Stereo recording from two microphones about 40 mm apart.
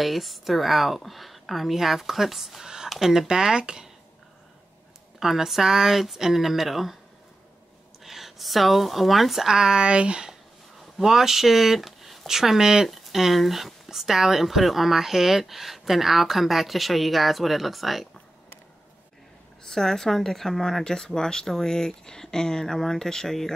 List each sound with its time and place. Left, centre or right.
0.0 s speech: centre
2.6 s a sound: centre
2.9 s speech: centre
5.2 s speech: centre
8.0 s speech: centre
9.5 s speech: centre
10.8 s speech: centre
19.6 s speech: centre